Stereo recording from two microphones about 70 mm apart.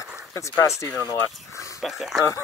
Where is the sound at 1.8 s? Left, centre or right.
Centre.